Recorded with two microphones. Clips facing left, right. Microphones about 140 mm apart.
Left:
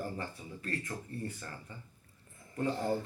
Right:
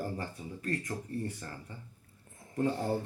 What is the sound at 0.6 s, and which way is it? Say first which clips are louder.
Speech: right 3 dB; 40° right (ahead or behind).